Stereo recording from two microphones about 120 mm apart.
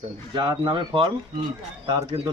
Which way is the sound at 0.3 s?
40° right (ahead or behind).